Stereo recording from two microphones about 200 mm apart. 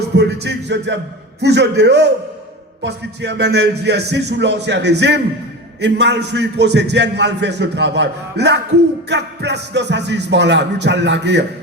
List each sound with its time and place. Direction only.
0.2 s a man's voice: 60° right (ahead or behind)